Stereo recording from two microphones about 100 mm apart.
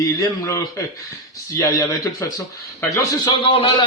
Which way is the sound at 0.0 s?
35° left (ahead or behind).